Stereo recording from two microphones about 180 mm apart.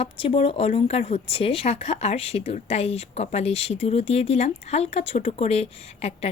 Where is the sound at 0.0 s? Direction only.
30° left (ahead or behind).